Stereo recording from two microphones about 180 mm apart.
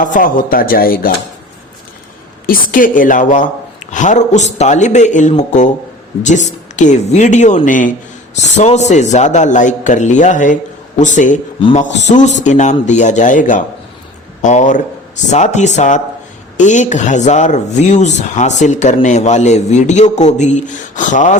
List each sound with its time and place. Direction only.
0.0 s speech: 50° left (ahead or behind)
2.5 s speech: 50° left (ahead or behind)